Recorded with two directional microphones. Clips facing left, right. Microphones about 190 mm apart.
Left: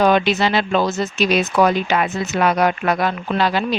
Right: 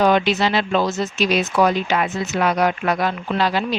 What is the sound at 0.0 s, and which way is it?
A woman's voice, 55° left (ahead or behind).